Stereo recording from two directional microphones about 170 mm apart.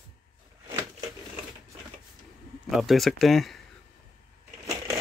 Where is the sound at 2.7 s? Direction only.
Centre (ahead or behind).